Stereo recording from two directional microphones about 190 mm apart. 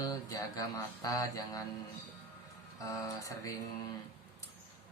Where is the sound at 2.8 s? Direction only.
15° left (ahead or behind).